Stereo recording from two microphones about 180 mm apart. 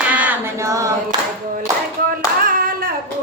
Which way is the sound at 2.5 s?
50° right (ahead or behind).